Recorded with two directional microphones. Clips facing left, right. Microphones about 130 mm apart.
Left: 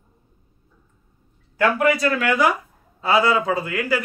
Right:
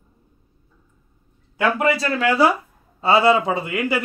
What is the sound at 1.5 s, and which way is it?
A man's voice, 25° right (ahead or behind).